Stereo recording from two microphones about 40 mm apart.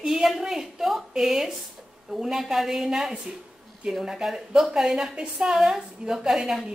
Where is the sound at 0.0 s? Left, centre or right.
Centre.